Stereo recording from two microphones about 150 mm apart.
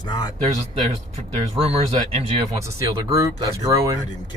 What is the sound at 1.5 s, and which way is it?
Speech, 40° right (ahead or behind).